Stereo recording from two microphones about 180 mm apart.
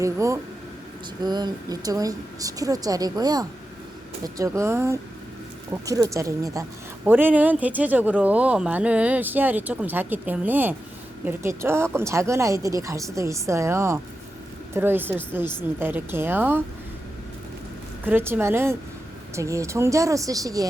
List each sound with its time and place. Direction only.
0.0 s speech: 15° right (ahead or behind)
18.0 s speech: 10° right (ahead or behind)